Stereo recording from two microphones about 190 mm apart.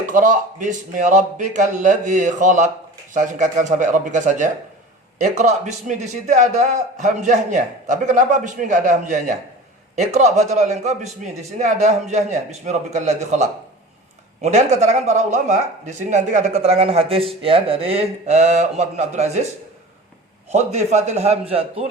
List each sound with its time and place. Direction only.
0.0 s speech: 45° right (ahead or behind)
20.5 s speech: 35° right (ahead or behind)